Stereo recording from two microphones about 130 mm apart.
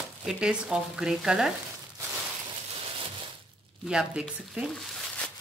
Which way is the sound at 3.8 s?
5° right (ahead or behind).